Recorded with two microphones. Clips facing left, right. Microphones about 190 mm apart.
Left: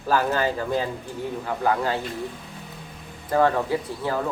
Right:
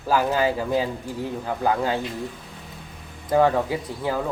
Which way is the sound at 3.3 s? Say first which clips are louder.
Right 2 dB; 10° right (ahead or behind).